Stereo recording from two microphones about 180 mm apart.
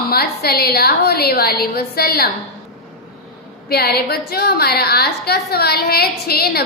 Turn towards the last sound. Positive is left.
turn(degrees=60)  # may be behind; listen again after turning